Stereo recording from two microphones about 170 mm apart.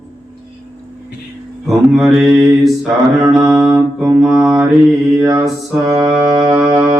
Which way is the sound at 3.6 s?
Centre (ahead or behind).